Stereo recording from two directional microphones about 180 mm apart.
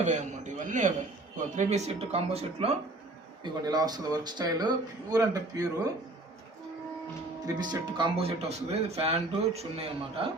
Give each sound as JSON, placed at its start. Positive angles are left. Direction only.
{"t": 0.1, "sound": "a man's voice", "side_deg": -45}
{"t": 3.4, "sound": "speech", "side_deg": -20}
{"t": 7.4, "sound": "speech", "side_deg": -25}